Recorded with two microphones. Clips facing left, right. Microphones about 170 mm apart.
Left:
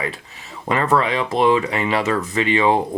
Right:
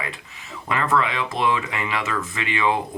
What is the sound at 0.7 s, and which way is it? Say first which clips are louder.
Speech: left 4 dB; 35° left (ahead or behind).